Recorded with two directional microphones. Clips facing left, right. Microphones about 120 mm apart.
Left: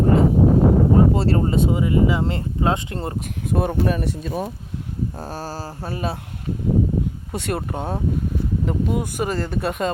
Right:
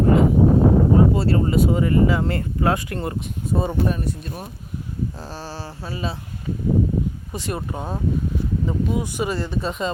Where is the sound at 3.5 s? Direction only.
65° left (ahead or behind); by 4.5 s 85° left.